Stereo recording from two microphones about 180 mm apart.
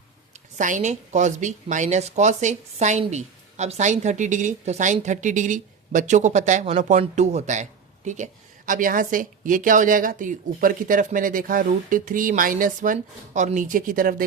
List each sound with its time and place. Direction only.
0.5 s speech: 45° right (ahead or behind)